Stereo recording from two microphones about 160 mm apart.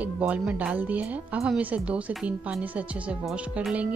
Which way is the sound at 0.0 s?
5° right (ahead or behind).